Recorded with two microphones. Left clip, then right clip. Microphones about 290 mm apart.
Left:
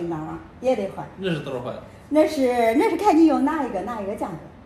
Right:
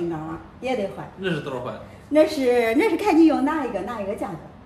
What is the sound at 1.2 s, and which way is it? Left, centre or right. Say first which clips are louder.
A man's voice: right 1 dB; centre.